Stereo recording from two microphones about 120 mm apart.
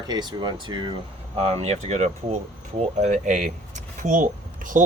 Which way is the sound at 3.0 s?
90° right.